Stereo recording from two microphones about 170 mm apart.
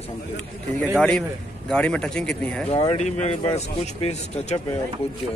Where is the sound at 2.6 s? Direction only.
35° left (ahead or behind).